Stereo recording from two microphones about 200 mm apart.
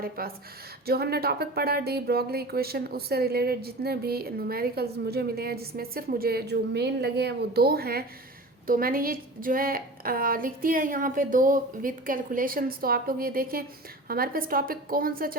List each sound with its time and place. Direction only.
0.2 s speech: 45° right (ahead or behind)